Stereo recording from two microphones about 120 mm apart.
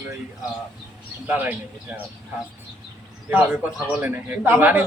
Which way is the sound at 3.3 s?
15° right (ahead or behind).